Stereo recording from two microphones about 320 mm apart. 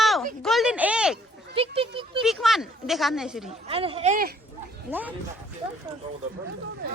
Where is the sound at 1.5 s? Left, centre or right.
Centre.